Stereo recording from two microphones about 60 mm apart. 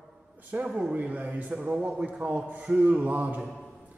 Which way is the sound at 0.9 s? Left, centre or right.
Right.